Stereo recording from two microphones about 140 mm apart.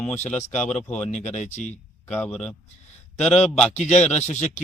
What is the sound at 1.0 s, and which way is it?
Speech, 55° left (ahead or behind).